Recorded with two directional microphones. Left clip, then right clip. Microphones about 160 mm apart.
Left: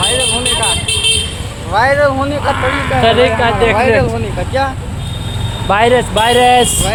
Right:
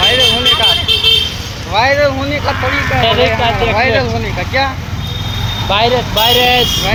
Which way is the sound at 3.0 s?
50° left (ahead or behind).